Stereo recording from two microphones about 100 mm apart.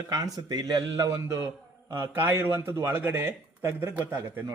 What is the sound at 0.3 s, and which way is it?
Speech, 40° right (ahead or behind).